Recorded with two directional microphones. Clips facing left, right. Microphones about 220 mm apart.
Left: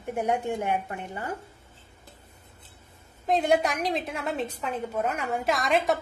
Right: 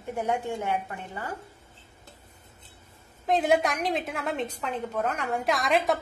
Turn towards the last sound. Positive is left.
turn(degrees=0)  # may be behind; listen again after turning